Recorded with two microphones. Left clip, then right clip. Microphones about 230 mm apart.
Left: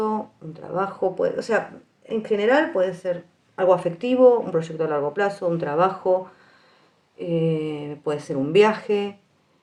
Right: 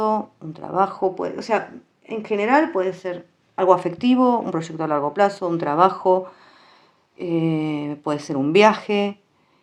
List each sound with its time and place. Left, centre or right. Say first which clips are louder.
0.0 s speech: right 4 dB; right